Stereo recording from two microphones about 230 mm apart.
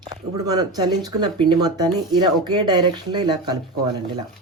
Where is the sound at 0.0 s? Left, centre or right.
Centre.